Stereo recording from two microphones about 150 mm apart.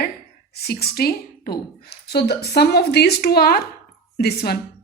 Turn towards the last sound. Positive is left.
turn(degrees=90)